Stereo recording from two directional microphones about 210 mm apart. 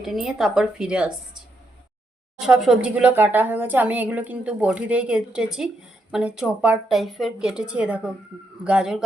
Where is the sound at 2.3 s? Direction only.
5° right (ahead or behind).